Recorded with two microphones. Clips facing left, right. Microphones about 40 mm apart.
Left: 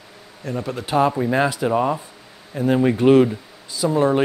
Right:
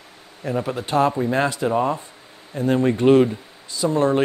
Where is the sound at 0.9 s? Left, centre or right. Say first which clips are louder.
Left 1 dB; centre.